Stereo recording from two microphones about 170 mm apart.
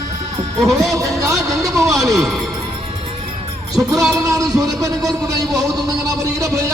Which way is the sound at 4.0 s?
Centre (ahead or behind).